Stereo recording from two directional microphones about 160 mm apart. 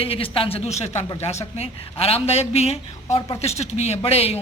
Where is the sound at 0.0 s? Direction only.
35° left (ahead or behind).